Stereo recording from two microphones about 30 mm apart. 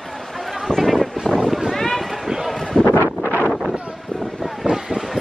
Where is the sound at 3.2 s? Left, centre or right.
Left.